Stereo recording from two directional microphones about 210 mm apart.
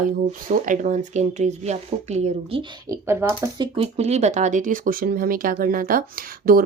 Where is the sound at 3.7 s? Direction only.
30° right (ahead or behind).